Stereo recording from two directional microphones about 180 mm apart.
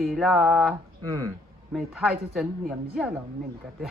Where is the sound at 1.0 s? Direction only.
20° right (ahead or behind).